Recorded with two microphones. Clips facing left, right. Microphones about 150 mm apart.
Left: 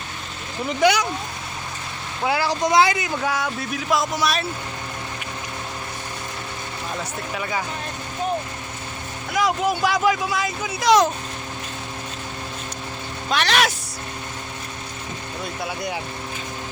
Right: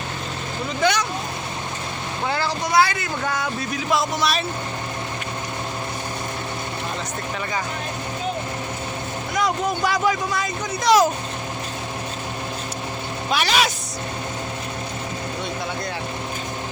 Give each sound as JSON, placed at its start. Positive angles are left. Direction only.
{"t": 0.8, "sound": "speech", "side_deg": 10}
{"t": 2.2, "sound": "speech", "side_deg": 10}
{"t": 3.3, "sound": "speech", "side_deg": 5}
{"t": 9.3, "sound": "speech", "side_deg": 5}
{"t": 13.3, "sound": "speech", "side_deg": -5}